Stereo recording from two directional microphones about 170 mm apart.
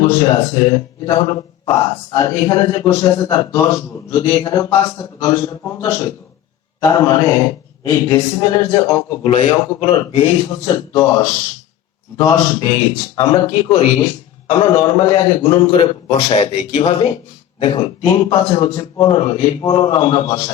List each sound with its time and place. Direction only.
0.0 s a man's voice: 25° left (ahead or behind)
14.5 s a man's voice: 25° left (ahead or behind)